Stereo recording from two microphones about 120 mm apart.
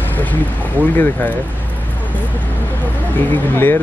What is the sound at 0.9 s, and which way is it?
Speech, 15° left (ahead or behind).